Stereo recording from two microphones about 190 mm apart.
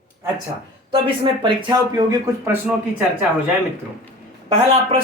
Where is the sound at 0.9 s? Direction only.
25° right (ahead or behind).